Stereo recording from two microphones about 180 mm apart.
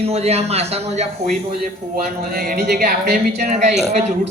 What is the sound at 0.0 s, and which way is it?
A man's voice, 35° right (ahead or behind).